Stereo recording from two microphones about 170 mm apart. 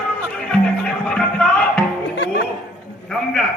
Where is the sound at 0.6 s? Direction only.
5° left (ahead or behind).